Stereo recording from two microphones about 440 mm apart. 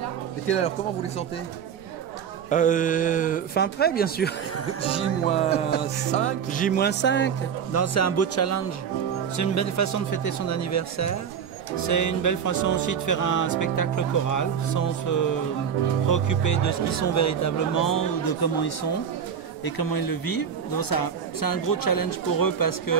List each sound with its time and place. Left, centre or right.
2.5 s speech: centre; by 22.9 s left